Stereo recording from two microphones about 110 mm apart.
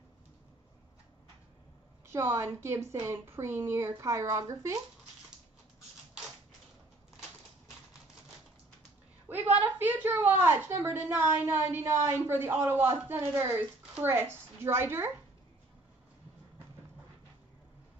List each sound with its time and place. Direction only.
2.0 s speech: 20° right (ahead or behind)
9.3 s a woman's voice: 20° right (ahead or behind)